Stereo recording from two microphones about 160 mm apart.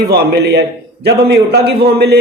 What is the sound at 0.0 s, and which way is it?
A man's voice, 90° right.